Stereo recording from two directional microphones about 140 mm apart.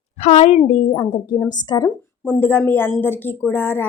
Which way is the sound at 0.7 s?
40° left (ahead or behind).